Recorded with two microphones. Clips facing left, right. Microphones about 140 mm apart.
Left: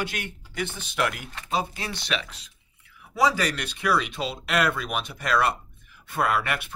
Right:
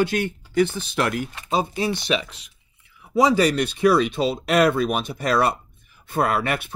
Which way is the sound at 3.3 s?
30° right (ahead or behind).